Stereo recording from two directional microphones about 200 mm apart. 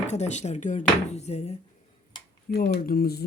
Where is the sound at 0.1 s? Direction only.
35° left (ahead or behind).